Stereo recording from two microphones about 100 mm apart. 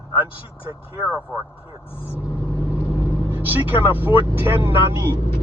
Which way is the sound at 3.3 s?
20° right (ahead or behind).